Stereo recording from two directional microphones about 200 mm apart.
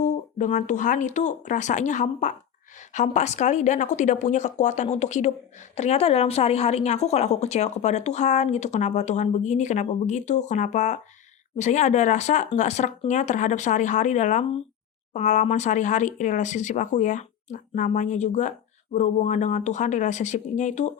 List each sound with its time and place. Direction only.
0.0 s a woman's voice: 40° left (ahead or behind)